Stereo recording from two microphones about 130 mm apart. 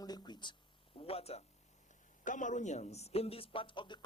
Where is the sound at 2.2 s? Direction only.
80° left; by 4.0 s 40° left (ahead or behind).